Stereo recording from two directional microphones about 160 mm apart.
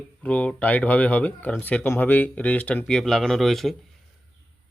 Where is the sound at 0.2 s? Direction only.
10° left (ahead or behind).